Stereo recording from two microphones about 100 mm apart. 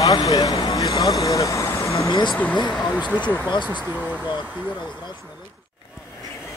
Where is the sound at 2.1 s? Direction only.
50° left (ahead or behind).